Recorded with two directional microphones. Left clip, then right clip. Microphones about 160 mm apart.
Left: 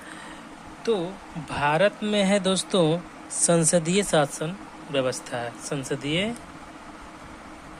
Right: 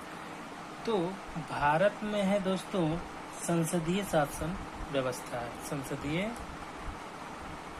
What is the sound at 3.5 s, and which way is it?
Speech, 65° left (ahead or behind).